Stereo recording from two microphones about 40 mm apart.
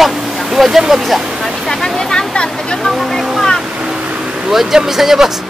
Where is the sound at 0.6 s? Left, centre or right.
Centre.